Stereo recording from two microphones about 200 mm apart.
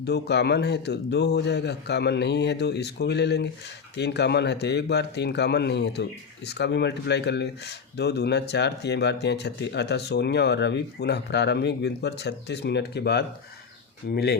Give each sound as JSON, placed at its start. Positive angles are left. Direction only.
{"t": 0.0, "sound": "speech", "side_deg": 55}